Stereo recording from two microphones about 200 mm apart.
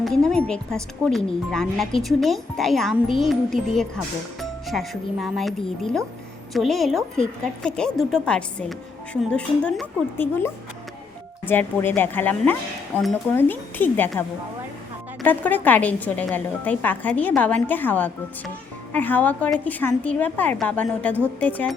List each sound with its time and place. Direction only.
0.0 s a woman's voice: 5° left (ahead or behind)
12.9 s speech: 10° right (ahead or behind)
13.3 s a woman's voice: 10° left (ahead or behind)